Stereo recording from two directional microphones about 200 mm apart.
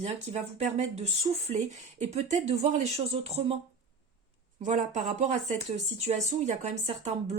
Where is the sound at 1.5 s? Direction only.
35° right (ahead or behind).